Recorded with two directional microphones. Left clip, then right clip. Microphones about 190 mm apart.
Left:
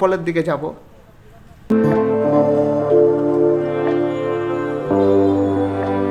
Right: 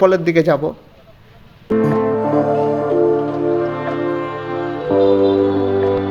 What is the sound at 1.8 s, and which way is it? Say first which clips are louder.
Music: left 1 dB; centre (ahead or behind).